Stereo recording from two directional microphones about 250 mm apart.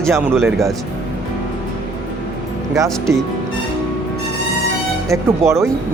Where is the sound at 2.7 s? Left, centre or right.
Centre.